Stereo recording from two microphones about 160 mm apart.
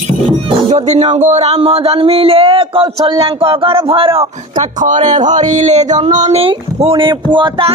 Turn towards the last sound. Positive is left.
turn(degrees=-30)  # may be behind; listen again after turning